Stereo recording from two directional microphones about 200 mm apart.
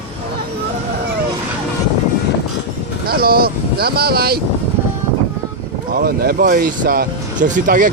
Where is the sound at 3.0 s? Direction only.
50° right (ahead or behind).